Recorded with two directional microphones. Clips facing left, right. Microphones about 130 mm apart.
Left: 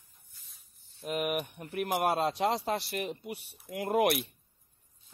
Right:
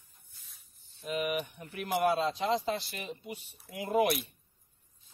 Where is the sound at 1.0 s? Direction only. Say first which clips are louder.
Left 1 dB; 55° left (ahead or behind).